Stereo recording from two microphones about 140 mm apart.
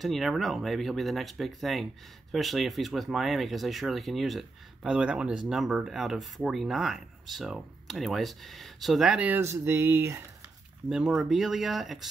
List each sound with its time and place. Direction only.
0.0 s speech: centre (ahead or behind); by 10.1 s 20° right (ahead or behind)
10.9 s speech: 5° right (ahead or behind)